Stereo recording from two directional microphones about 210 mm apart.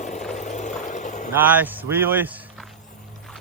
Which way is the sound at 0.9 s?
35° left (ahead or behind).